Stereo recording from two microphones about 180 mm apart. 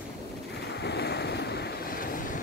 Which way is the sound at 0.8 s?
65° left (ahead or behind).